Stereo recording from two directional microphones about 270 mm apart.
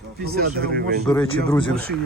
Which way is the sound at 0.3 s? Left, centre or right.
Right.